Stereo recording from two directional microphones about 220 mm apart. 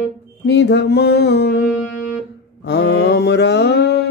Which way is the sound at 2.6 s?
50° left (ahead or behind).